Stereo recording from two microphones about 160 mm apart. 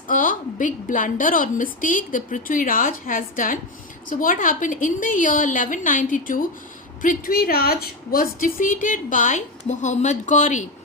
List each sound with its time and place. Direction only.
0.1 s a woman's voice: 55° left (ahead or behind)